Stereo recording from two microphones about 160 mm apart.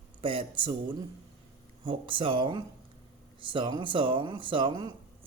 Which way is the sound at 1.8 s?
35° right (ahead or behind).